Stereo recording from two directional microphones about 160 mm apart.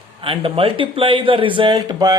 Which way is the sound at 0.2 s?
35° right (ahead or behind).